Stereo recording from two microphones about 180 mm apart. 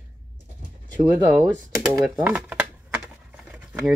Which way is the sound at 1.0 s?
10° right (ahead or behind).